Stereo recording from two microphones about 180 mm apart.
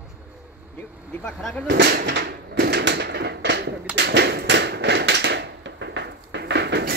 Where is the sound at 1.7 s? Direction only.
65° right (ahead or behind).